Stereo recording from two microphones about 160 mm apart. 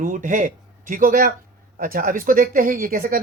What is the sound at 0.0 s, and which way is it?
Speech, 55° right (ahead or behind).